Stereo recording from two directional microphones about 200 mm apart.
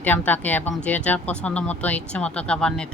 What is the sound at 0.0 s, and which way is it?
A woman's voice, 10° left (ahead or behind).